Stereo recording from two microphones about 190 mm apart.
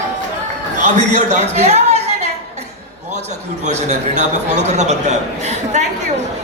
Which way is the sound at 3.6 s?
40° right (ahead or behind).